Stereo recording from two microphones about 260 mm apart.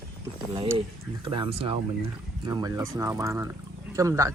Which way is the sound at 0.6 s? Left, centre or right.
Centre.